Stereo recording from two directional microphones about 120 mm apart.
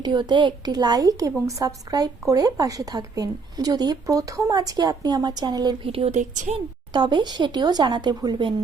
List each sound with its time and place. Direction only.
0.0 s a woman's voice: 40° right (ahead or behind)
5.8 s speech: 50° right (ahead or behind)
6.1 s a woman's voice: 90° right
6.9 s a woman's voice: 40° right (ahead or behind)